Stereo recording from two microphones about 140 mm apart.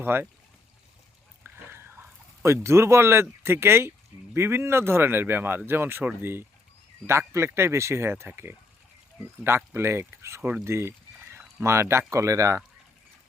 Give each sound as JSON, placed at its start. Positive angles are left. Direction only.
{"t": 0.0, "sound": "speech", "side_deg": -15}
{"t": 1.5, "sound": "a sound", "side_deg": -15}
{"t": 4.4, "sound": "speech", "side_deg": -15}